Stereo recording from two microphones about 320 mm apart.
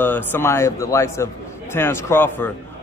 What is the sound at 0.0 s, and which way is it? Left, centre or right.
A man's voice, centre.